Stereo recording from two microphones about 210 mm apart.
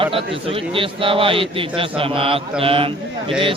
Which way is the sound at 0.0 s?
25° right (ahead or behind).